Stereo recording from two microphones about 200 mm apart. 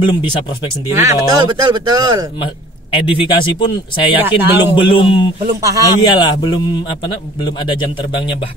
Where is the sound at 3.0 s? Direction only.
25° left (ahead or behind).